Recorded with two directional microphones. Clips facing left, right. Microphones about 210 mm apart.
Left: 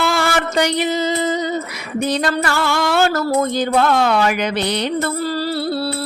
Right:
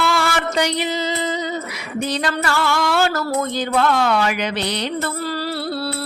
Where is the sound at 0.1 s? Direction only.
45° left (ahead or behind).